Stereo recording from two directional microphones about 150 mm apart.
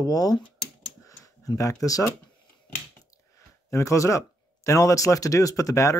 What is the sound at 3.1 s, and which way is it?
Speech, 20° left (ahead or behind).